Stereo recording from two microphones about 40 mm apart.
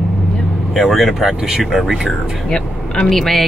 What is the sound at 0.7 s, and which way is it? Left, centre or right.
Speech, centre.